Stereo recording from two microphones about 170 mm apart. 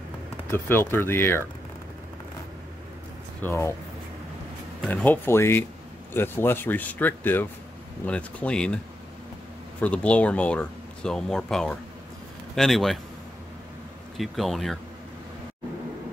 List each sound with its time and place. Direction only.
0.5 s speech: 15° left (ahead or behind)
3.4 s speech: 15° left (ahead or behind)
4.8 s speech: 10° left (ahead or behind)
9.8 s speech: 10° left (ahead or behind)
14.1 s speech: centre (ahead or behind)